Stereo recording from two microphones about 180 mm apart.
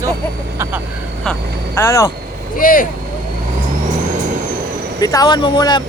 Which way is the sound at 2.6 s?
50° left (ahead or behind).